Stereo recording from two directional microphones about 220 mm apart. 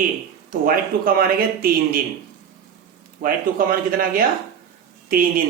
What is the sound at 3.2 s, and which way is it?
Speech, 40° right (ahead or behind).